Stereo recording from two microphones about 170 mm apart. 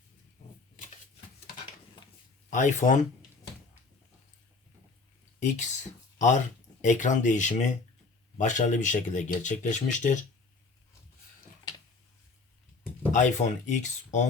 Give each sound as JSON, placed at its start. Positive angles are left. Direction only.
{"t": 2.5, "sound": "speech", "side_deg": 45}
{"t": 5.4, "sound": "speech", "side_deg": 45}
{"t": 13.1, "sound": "speech", "side_deg": 45}